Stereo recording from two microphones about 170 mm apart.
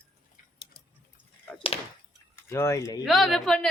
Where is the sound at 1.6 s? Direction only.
35° left (ahead or behind).